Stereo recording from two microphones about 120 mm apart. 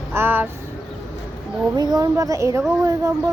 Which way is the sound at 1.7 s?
35° right (ahead or behind).